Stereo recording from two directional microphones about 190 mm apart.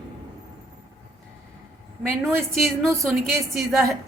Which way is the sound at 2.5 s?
Centre (ahead or behind).